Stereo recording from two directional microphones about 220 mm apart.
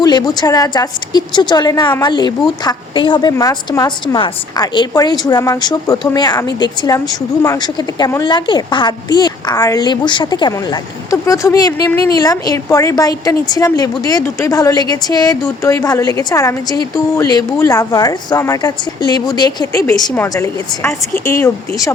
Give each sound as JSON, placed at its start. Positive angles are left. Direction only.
{"t": 0.0, "sound": "a woman's voice", "side_deg": 20}